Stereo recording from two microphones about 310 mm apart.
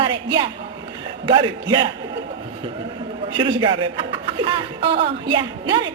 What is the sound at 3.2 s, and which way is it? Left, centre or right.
A man's voice, centre.